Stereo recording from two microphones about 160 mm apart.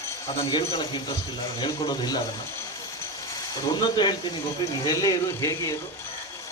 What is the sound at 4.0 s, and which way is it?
Speech, 30° left (ahead or behind).